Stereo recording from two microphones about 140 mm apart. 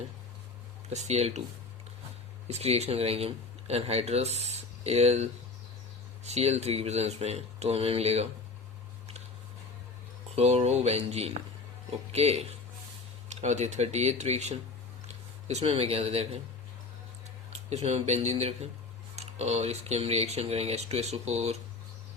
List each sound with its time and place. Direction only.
0.9 s speech: 50° right (ahead or behind)
2.5 s speech: 50° right (ahead or behind)
10.3 s speech: 50° right (ahead or behind)
17.5 s speech: 50° right (ahead or behind)